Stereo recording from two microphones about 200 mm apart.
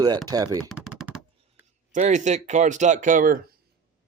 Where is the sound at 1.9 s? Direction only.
35° right (ahead or behind).